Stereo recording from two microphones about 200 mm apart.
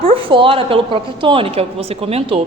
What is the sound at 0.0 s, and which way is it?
A woman's voice, 25° right (ahead or behind).